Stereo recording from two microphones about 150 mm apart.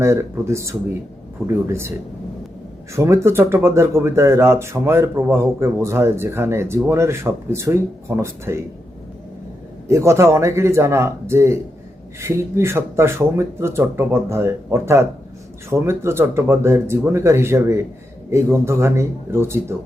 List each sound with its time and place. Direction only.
0.0 s speech: 20° right (ahead or behind)
2.9 s speech: 20° right (ahead or behind)
9.9 s speech: 20° right (ahead or behind)